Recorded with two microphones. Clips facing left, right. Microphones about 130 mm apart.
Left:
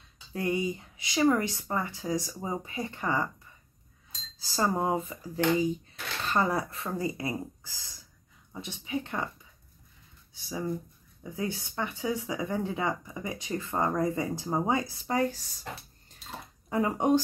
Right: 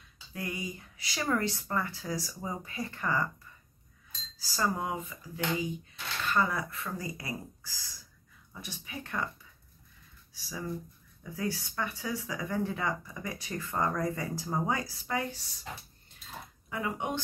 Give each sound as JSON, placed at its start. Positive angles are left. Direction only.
{"t": 0.3, "sound": "speech", "side_deg": 30}
{"t": 4.4, "sound": "speech", "side_deg": 25}
{"t": 10.3, "sound": "speech", "side_deg": 25}
{"t": 15.0, "sound": "speech", "side_deg": 35}
{"t": 16.6, "sound": "speech", "side_deg": 35}